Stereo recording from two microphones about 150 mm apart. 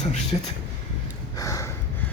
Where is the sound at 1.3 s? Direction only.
20° left (ahead or behind).